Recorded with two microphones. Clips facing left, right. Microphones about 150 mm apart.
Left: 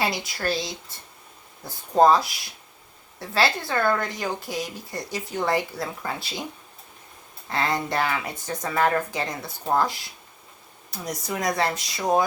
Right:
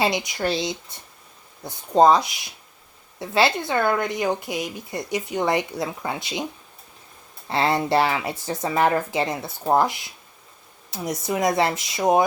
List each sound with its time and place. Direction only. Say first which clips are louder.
0.0 s speech: right 4 dB; 20° right (ahead or behind)
7.5 s speech: right 5 dB; 30° right (ahead or behind)